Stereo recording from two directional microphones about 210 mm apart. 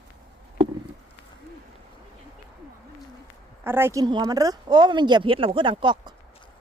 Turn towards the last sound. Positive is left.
turn(degrees=-20)  # may be behind; listen again after turning